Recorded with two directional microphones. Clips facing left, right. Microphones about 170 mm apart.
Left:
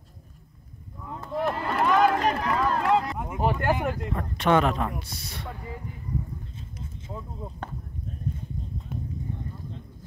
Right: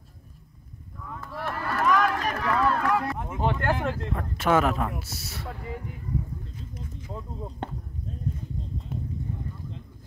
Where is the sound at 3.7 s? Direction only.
10° left (ahead or behind).